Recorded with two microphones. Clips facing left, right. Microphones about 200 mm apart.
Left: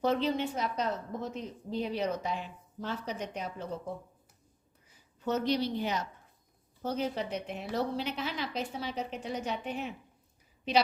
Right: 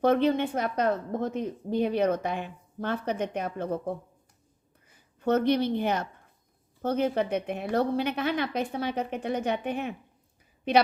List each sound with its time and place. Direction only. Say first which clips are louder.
0.0 s a woman's voice: right 6 dB; 55° right (ahead or behind)